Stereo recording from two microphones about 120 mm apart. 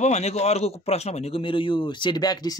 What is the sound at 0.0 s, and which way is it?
A man's voice, 65° left (ahead or behind).